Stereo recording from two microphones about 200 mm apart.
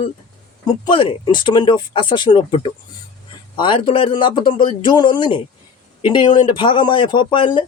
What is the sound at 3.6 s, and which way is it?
Speech, 25° left (ahead or behind).